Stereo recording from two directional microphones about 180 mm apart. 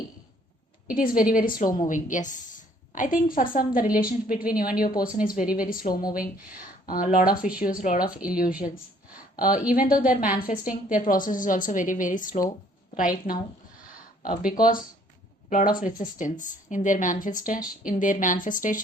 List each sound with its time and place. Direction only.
0.9 s a woman's voice: 50° left (ahead or behind)
14.6 s a woman's voice: 50° left (ahead or behind)